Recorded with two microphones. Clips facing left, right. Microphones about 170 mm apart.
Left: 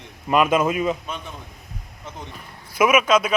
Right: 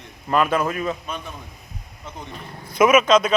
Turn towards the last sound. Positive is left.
turn(degrees=10)  # may be behind; listen again after turning